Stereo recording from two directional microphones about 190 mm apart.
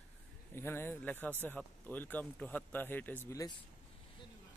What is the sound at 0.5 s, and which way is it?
Speech, 10° left (ahead or behind).